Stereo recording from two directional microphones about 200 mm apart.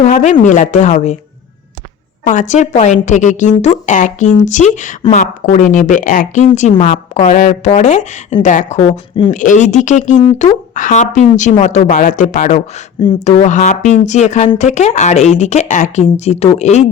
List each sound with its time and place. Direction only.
0.0 s a sound: 35° left (ahead or behind)
0.4 s a woman's voice: 40° left (ahead or behind)
2.2 s a woman's voice: 40° left (ahead or behind)
12.5 s speech: 25° left (ahead or behind)
13.2 s a woman's voice: 35° left (ahead or behind)